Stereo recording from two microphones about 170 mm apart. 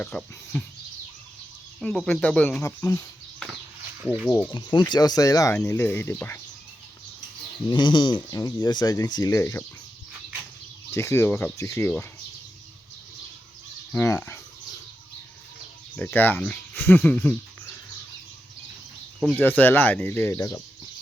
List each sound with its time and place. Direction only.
0.0 s speech: 5° left (ahead or behind)
1.8 s speech: 5° left (ahead or behind)
4.0 s speech: 5° right (ahead or behind)
4.3 s speech: 10° left (ahead or behind)
4.5 s speech: 25° left (ahead or behind)
7.7 s speech: 30° left (ahead or behind)
10.9 s speech: 15° left (ahead or behind)
13.9 s speech: 15° left (ahead or behind)
16.0 s speech: 10° left (ahead or behind)
19.4 s speech: 10° left (ahead or behind)